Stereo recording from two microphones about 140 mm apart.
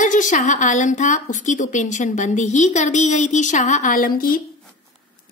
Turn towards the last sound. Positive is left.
turn(degrees=85)